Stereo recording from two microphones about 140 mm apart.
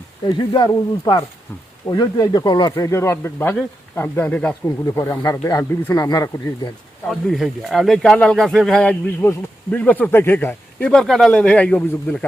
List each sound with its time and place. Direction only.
0.3 s speech: 30° left (ahead or behind); by 4.5 s 10° left (ahead or behind)
4.9 s speech: 20° left (ahead or behind)
7.1 s speech: centre (ahead or behind)